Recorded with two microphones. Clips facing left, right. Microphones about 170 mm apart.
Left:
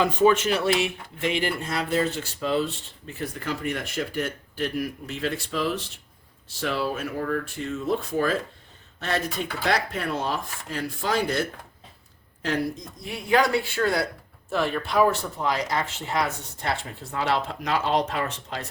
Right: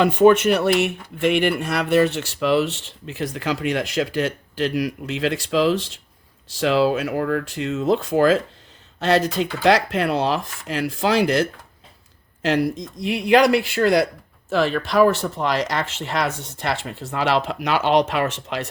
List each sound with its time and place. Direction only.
0.0 s speech: 65° right (ahead or behind)